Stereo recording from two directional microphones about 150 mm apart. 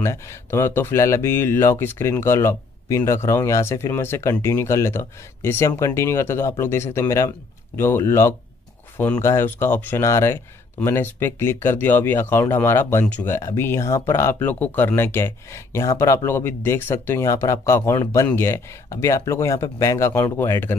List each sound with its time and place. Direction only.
0.0 s speech: 20° left (ahead or behind)